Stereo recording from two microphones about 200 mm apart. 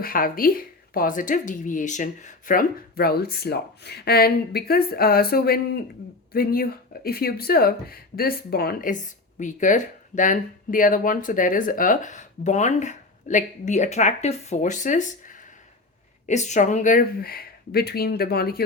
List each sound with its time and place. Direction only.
0.0 s a woman's voice: 45° left (ahead or behind)